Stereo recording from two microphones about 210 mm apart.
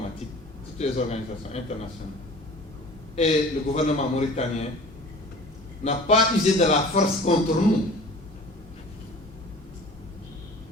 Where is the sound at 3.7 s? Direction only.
30° left (ahead or behind).